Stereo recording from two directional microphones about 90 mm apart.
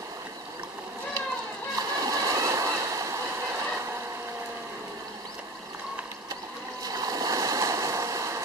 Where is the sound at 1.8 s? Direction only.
40° right (ahead or behind).